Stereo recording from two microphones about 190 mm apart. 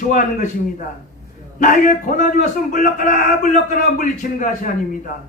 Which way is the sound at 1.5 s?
45° left (ahead or behind).